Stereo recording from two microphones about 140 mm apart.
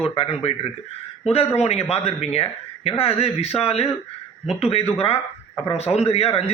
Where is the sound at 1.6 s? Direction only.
45° left (ahead or behind).